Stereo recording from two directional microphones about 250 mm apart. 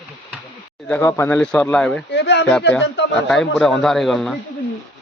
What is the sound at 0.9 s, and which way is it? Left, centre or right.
Speech, centre.